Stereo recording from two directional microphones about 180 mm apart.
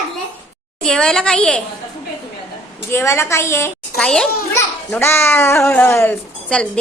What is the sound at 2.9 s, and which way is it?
Speech, 15° left (ahead or behind).